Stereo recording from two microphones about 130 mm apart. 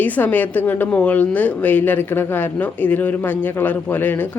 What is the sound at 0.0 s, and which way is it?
A woman's voice, 15° left (ahead or behind).